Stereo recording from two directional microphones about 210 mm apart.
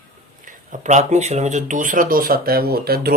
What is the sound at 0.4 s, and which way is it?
Speech, 35° right (ahead or behind).